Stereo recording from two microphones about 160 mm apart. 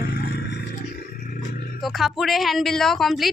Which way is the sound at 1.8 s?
Centre (ahead or behind).